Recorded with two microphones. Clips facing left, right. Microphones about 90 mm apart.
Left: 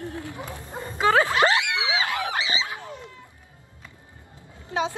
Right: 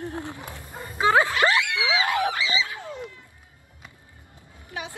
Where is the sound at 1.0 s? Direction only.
20° right (ahead or behind).